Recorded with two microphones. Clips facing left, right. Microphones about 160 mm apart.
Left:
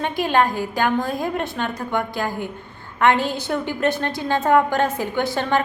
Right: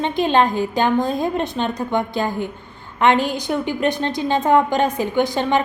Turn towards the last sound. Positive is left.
turn(degrees=-20)  # may be behind; listen again after turning